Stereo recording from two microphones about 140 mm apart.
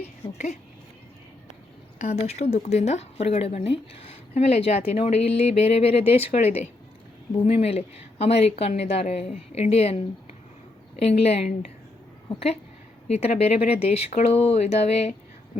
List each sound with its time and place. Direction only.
0.2 s speech: 35° left (ahead or behind)
2.0 s speech: 50° left (ahead or behind)
11.0 s speech: 45° left (ahead or behind)
13.1 s speech: 50° left (ahead or behind)